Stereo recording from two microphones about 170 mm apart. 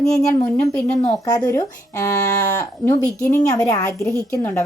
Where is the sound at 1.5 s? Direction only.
15° left (ahead or behind).